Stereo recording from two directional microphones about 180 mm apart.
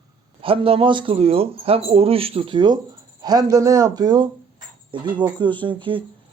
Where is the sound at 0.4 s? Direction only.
30° right (ahead or behind).